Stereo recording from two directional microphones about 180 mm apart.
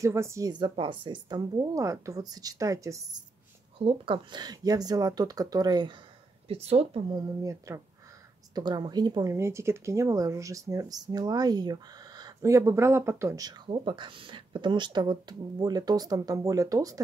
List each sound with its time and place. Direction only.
0.0 s speech: 15° right (ahead or behind)
3.7 s speech: 30° right (ahead or behind)
6.5 s speech: 35° right (ahead or behind)
7.2 s speech: 20° right (ahead or behind)